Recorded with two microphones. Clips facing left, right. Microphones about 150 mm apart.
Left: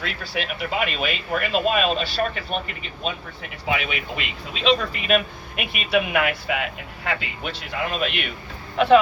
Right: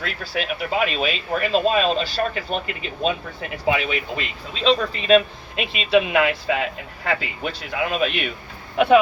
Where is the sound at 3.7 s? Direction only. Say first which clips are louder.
Right 3 dB; 35° right (ahead or behind).